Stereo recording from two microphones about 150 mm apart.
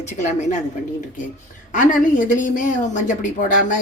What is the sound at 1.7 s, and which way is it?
Speech, 60° left (ahead or behind).